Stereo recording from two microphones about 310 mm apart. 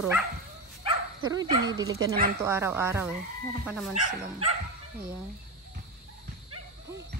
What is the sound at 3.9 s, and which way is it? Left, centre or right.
Speech, right.